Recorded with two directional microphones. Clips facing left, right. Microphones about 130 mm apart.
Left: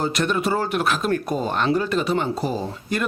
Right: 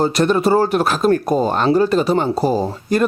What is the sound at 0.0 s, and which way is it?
Speech, 35° right (ahead or behind).